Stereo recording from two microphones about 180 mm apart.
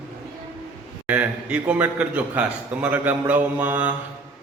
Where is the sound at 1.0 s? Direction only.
5° right (ahead or behind).